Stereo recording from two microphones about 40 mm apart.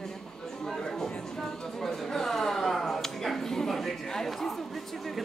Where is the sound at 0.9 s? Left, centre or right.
Centre.